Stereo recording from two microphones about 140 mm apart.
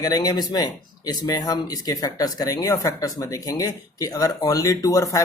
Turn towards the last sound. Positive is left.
turn(degrees=25)  # may be behind; listen again after turning